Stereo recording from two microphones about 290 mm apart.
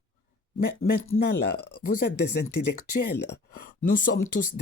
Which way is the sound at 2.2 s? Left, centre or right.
Left.